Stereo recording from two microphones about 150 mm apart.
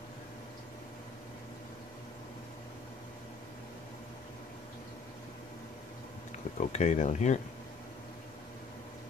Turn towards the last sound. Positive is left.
turn(degrees=50)  # may be behind; listen again after turning